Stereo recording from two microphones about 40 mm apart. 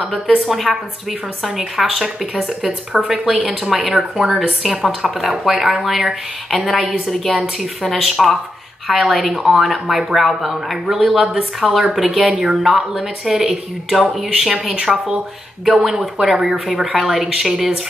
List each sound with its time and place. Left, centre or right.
0.1 s a woman's voice: centre
1.8 s a woman's voice: centre
3.3 s speech: right
3.7 s a woman's voice: centre
14.6 s a woman's voice: centre